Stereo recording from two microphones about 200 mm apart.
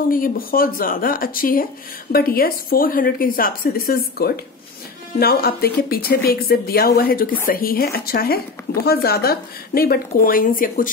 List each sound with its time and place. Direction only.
0.1 s a woman's voice: 45° left (ahead or behind)